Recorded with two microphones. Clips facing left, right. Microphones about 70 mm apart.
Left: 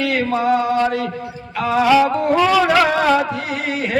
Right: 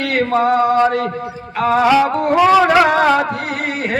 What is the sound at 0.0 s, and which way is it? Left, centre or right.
Music, right.